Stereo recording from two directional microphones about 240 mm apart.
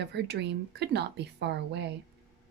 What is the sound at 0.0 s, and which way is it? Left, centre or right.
Speech, right.